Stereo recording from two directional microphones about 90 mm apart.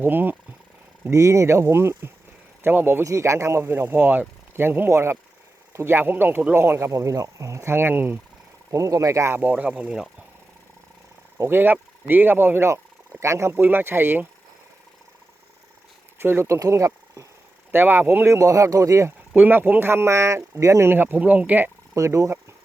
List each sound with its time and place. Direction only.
0.0 s speech: 20° right (ahead or behind)
1.0 s speech: 35° right (ahead or behind)
3.0 s speech: 35° right (ahead or behind)
8.7 s speech: 40° right (ahead or behind)
9.4 s speech: 20° right (ahead or behind)
11.3 s speech: 25° right (ahead or behind)
16.2 s speech: 25° right (ahead or behind)
16.6 s speech: 40° right (ahead or behind)
17.7 s speech: 25° right (ahead or behind)
18.3 s speech: 35° right (ahead or behind)
19.3 s speech: 20° right (ahead or behind)
21.9 s speech: 35° right (ahead or behind)